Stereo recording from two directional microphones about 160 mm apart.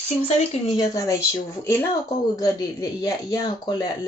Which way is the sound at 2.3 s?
20° left (ahead or behind).